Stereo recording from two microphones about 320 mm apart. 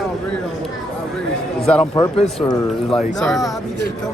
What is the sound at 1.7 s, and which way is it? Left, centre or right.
Speech, centre.